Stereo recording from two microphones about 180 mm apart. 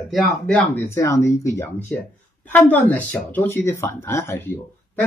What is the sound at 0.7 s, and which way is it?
Speech, 15° left (ahead or behind).